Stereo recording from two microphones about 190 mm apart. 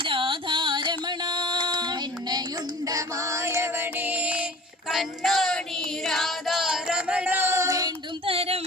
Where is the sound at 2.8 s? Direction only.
20° right (ahead or behind).